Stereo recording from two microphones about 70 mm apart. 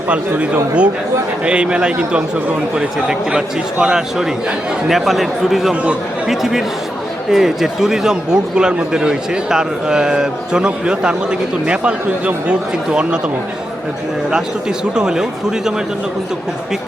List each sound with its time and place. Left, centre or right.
0.1 s a man's voice: centre
14.9 s a man's voice: centre